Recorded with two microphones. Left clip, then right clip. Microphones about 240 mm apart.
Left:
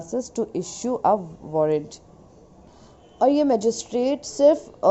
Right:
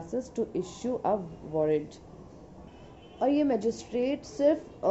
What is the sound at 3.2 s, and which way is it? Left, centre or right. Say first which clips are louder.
A woman's voice: left 8 dB; left.